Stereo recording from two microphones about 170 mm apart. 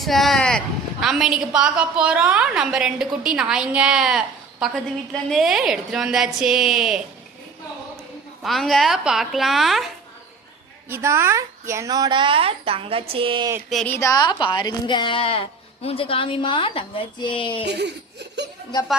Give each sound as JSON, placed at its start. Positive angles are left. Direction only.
{"t": 0.0, "sound": "a woman's voice", "side_deg": 0}
{"t": 8.4, "sound": "a woman's voice", "side_deg": 0}
{"t": 10.8, "sound": "a woman's voice", "side_deg": -15}
{"t": 13.8, "sound": "speech", "side_deg": 15}
{"t": 17.7, "sound": "laughter", "side_deg": -85}
{"t": 18.9, "sound": "a woman's voice", "side_deg": 0}